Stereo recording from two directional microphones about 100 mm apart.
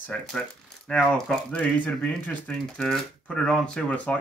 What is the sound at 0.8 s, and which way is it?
Speech, 5° left (ahead or behind).